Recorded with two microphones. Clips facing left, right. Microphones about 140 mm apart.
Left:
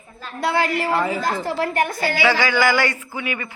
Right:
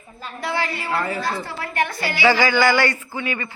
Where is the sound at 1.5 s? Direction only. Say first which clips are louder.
Left 4 dB; 45° left (ahead or behind).